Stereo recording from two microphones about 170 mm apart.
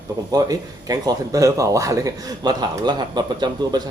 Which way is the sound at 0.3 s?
20° right (ahead or behind).